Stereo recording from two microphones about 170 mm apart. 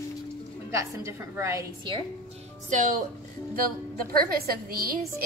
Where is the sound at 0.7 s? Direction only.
15° right (ahead or behind).